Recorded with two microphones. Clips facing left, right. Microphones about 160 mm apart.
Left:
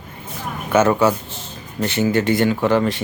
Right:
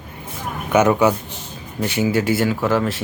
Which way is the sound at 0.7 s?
15° right (ahead or behind).